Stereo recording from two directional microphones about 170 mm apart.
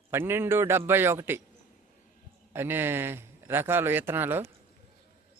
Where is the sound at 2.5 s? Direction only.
15° right (ahead or behind).